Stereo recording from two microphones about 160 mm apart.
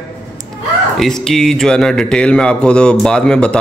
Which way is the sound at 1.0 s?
5° left (ahead or behind).